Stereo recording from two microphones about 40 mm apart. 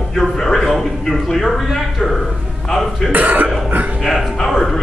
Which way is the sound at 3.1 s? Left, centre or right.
Right.